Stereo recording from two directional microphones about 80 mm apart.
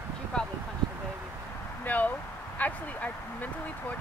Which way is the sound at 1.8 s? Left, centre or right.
Left.